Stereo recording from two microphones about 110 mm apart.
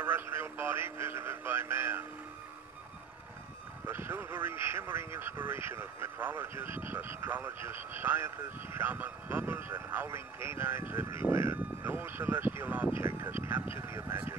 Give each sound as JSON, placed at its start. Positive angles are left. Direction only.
{"t": 0.0, "sound": "radio", "side_deg": -20}
{"t": 3.8, "sound": "speech", "side_deg": -20}